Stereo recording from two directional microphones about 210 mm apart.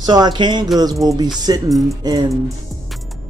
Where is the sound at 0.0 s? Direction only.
20° right (ahead or behind).